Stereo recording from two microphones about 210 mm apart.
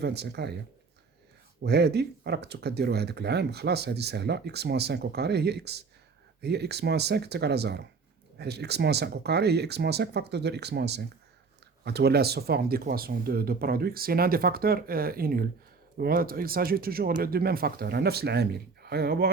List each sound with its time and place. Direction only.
0.0 s speech: 50° right (ahead or behind)
1.6 s speech: 50° right (ahead or behind)